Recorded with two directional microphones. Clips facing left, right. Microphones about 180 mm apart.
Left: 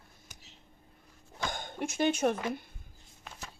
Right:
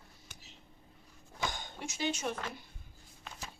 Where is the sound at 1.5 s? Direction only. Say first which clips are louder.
Left 8 dB; 55° left (ahead or behind).